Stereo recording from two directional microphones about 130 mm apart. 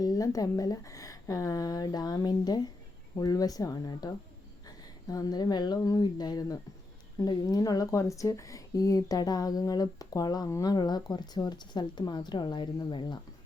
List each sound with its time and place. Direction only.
0.0 s speech: 25° left (ahead or behind)